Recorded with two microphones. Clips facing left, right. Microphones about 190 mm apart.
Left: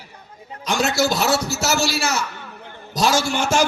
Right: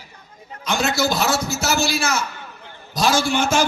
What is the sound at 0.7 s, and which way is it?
A man's voice, 40° left (ahead or behind).